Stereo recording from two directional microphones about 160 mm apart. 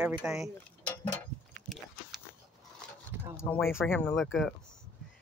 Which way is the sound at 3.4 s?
15° left (ahead or behind).